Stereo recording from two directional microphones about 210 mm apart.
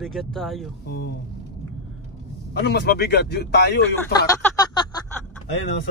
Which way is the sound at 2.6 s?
55° left (ahead or behind).